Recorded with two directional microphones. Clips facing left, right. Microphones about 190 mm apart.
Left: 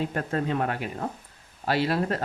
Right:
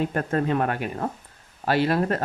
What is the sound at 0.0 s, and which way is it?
Speech, 55° right (ahead or behind).